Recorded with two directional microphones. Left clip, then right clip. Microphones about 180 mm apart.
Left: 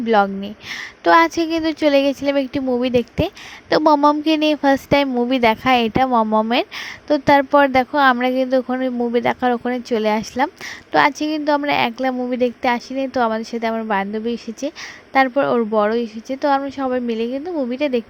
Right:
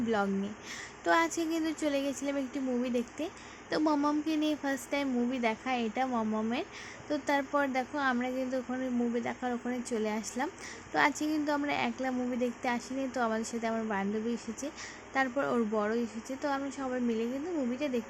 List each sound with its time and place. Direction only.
0.1 s a woman's voice: 40° left (ahead or behind)